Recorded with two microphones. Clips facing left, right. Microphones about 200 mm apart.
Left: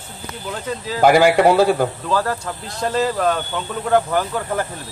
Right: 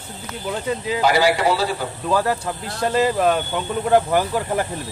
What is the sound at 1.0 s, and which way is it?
Speech, 50° left (ahead or behind).